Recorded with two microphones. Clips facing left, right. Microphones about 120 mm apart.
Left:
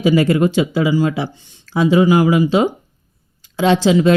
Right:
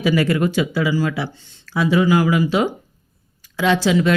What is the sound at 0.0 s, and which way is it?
A woman's voice, 25° left (ahead or behind).